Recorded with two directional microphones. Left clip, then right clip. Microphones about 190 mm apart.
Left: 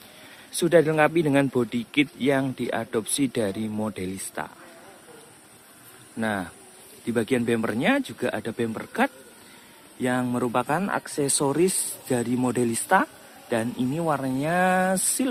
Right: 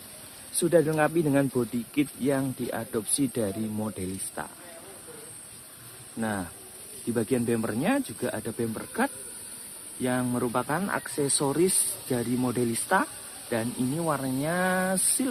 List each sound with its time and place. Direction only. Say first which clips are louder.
0.6 s speech: left 4 dB; 20° left (ahead or behind)
6.1 s speech: left 4 dB; 25° left (ahead or behind)